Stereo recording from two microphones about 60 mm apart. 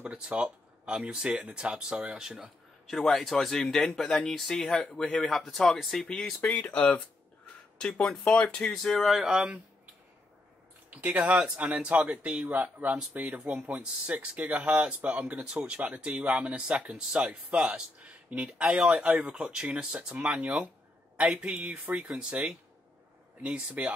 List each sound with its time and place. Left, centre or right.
0.0 s speech: centre
2.9 s speech: centre
6.4 s speech: left
8.9 s speech: centre
10.9 s speech: right
15.3 s speech: centre